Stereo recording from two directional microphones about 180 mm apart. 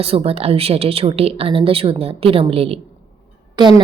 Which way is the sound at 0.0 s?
35° right (ahead or behind).